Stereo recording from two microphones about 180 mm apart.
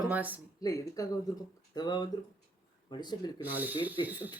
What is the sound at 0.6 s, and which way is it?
Speech, 20° left (ahead or behind).